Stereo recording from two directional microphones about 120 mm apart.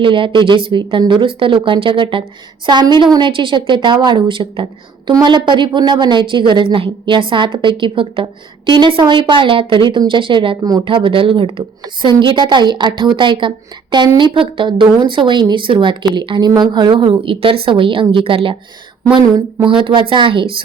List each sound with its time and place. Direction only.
0.0 s a woman's voice: 45° right (ahead or behind)
19.6 s a woman's voice: 45° right (ahead or behind)